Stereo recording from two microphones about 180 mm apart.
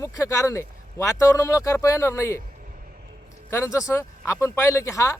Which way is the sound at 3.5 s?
15° left (ahead or behind).